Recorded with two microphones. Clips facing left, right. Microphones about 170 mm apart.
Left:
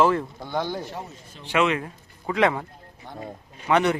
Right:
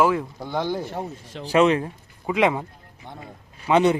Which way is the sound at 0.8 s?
55° right (ahead or behind).